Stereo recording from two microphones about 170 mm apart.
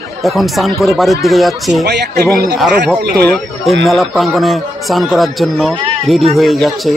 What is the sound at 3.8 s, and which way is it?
Speech, centre (ahead or behind).